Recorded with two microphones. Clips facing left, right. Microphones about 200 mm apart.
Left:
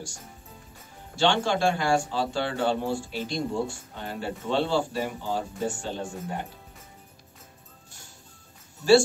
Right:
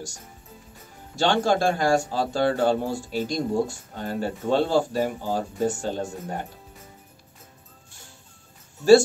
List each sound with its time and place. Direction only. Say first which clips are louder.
1.1 s speech: right 3 dB; 40° right (ahead or behind)